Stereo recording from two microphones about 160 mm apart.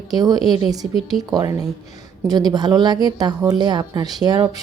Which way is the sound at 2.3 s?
25° right (ahead or behind).